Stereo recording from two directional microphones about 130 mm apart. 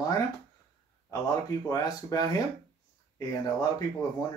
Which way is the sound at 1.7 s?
30° left (ahead or behind).